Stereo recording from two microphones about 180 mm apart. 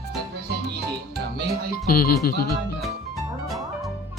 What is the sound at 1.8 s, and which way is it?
Speech, 55° left (ahead or behind).